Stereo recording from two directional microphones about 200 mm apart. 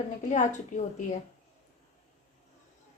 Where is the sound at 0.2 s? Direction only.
35° left (ahead or behind).